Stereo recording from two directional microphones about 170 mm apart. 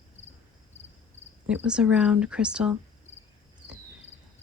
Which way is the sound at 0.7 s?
40° left (ahead or behind).